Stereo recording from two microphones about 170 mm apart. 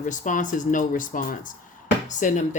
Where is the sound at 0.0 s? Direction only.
50° left (ahead or behind).